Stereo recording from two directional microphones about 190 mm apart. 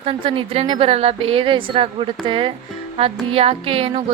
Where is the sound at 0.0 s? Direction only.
30° right (ahead or behind).